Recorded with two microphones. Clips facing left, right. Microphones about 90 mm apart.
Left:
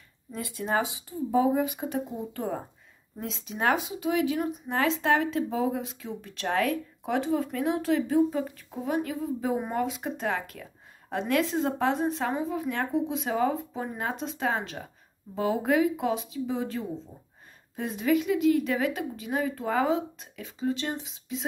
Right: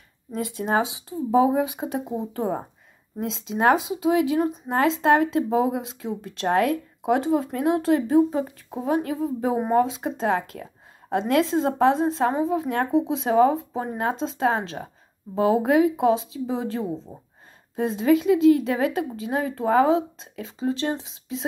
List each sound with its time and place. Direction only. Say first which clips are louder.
0.3 s speech: right 5 dB; 20° right (ahead or behind)